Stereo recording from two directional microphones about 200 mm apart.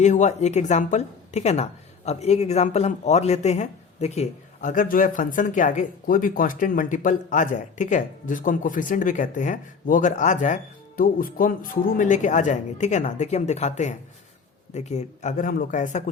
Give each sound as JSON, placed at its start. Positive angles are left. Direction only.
{"t": 0.0, "sound": "a woman's voice", "side_deg": 35}